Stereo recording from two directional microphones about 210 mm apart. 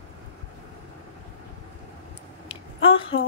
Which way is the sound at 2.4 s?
25° left (ahead or behind).